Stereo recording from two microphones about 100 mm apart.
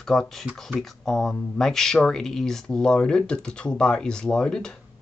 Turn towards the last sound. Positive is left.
turn(degrees=5)  # may be behind; listen again after turning